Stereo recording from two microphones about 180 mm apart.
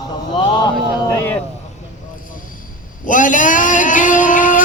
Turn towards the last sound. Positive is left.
turn(degrees=45)  # may be behind; listen again after turning